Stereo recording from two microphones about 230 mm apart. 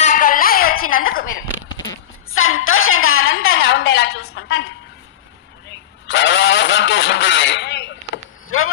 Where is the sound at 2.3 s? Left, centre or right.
Left.